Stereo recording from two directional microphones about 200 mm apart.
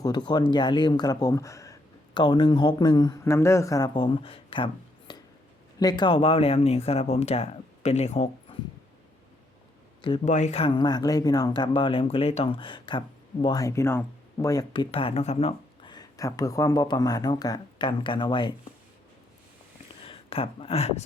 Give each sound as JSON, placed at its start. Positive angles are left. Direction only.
{"t": 0.0, "sound": "speech", "side_deg": 20}
{"t": 10.2, "sound": "speech", "side_deg": 35}
{"t": 20.1, "sound": "speech", "side_deg": 30}